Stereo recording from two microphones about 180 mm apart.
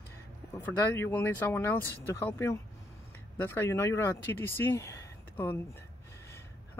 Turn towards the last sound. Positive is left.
turn(degrees=15)  # may be behind; listen again after turning